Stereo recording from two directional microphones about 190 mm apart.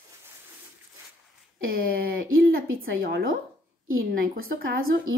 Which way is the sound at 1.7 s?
50° right (ahead or behind).